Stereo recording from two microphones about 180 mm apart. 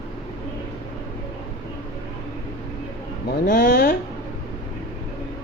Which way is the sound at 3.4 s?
50° left (ahead or behind).